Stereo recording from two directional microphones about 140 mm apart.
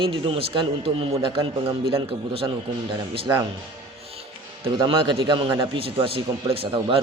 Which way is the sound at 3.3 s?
25° right (ahead or behind).